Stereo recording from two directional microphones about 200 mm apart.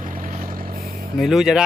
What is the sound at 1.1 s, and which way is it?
Speech, centre (ahead or behind).